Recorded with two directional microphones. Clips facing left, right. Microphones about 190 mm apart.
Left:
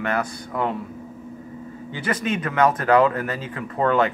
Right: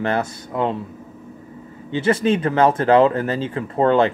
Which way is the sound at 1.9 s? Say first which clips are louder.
Right 7 dB; 30° right (ahead or behind).